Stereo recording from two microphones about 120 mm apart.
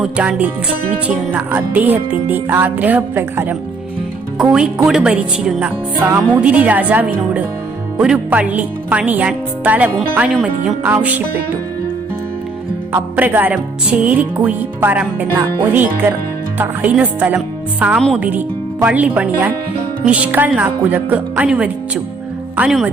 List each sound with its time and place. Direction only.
0.0 s speech: 10° right (ahead or behind)
6.0 s music: 20° right (ahead or behind)
6.4 s speech: 10° right (ahead or behind)
12.9 s speech: 15° right (ahead or behind)